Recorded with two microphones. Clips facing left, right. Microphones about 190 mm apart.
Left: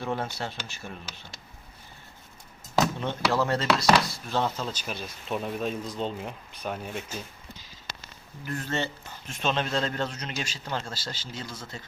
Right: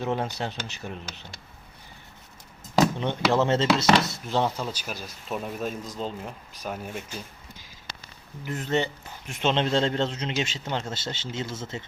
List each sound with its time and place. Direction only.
0.0 s a man's voice: 20° right (ahead or behind)
2.7 s a man's voice: 20° right (ahead or behind)
8.4 s a man's voice: 20° right (ahead or behind)